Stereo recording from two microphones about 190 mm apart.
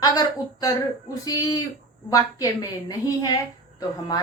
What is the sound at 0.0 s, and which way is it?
A woman's voice, 20° left (ahead or behind).